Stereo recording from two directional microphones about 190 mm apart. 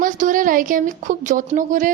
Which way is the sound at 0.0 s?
45° right (ahead or behind).